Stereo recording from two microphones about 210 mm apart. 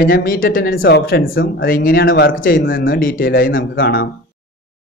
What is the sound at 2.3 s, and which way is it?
Speech, 40° left (ahead or behind).